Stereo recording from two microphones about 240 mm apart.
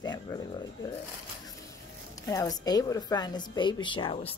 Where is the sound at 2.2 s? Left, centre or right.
Centre.